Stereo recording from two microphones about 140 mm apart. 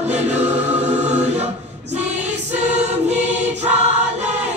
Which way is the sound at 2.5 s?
50° right (ahead or behind).